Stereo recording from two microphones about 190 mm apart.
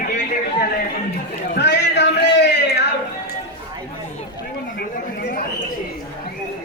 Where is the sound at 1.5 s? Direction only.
65° left (ahead or behind).